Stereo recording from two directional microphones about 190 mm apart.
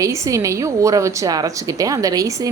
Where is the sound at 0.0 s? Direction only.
15° right (ahead or behind).